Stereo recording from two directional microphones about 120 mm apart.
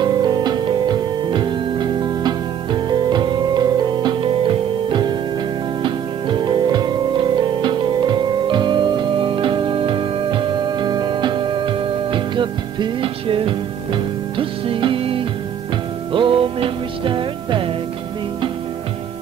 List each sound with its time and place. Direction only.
0.0 s music: 35° right (ahead or behind)